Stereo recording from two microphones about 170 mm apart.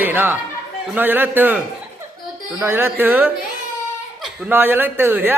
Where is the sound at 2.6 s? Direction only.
10° right (ahead or behind).